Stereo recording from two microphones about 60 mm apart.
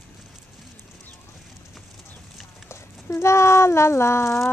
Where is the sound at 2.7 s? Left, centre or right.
Left.